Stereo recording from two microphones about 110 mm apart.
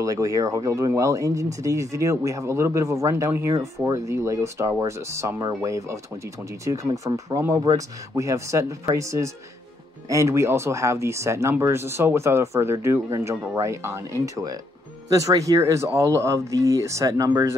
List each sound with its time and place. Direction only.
0.0 s speech: 30° right (ahead or behind)